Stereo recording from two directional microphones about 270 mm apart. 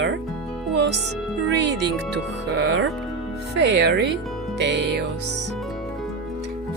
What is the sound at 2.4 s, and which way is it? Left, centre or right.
Speech, right.